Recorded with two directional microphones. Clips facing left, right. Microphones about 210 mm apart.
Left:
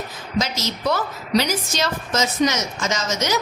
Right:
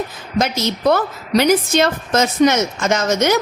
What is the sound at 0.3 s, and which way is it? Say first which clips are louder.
A woman's voice: right 5 dB; 55° right (ahead or behind).